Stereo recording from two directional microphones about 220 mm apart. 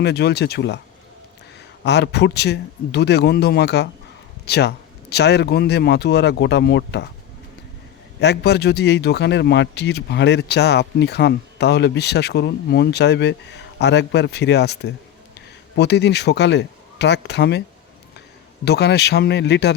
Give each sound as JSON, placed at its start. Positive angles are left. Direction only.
{"t": 0.0, "sound": "a man's voice", "side_deg": 50}
{"t": 1.8, "sound": "a man's voice", "side_deg": 50}
{"t": 8.2, "sound": "a man's voice", "side_deg": 50}
{"t": 18.6, "sound": "a man's voice", "side_deg": 50}